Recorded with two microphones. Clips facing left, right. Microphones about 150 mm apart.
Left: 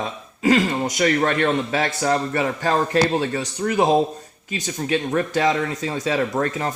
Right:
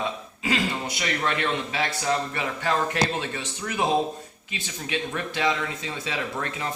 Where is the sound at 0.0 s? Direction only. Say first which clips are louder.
Left 7 dB; 45° left (ahead or behind).